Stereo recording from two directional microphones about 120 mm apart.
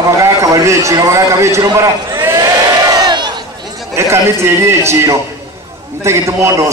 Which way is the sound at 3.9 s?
20° right (ahead or behind).